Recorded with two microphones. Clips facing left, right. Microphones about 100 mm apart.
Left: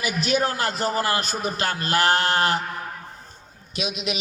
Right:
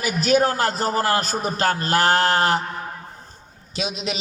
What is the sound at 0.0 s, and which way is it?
A man's voice, 40° right (ahead or behind).